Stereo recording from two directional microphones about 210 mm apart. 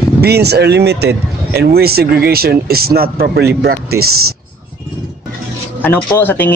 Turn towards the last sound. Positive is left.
turn(degrees=10)  # may be behind; listen again after turning